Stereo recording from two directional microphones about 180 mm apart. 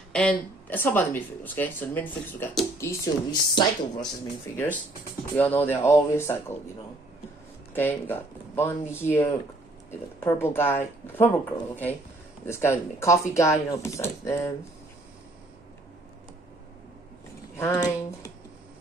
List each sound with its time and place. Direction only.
0.1 s speech: 5° left (ahead or behind)
2.8 s speech: 25° left (ahead or behind)
7.7 s speech: 10° left (ahead or behind)
17.6 s speech: 20° left (ahead or behind)